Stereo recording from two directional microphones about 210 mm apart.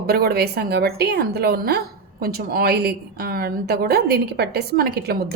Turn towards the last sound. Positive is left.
turn(degrees=-50)  # may be behind; listen again after turning